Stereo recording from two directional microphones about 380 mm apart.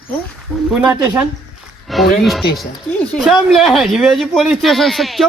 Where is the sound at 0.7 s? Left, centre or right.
Centre.